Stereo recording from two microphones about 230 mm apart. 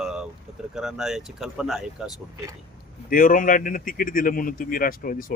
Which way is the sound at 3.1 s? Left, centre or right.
Left.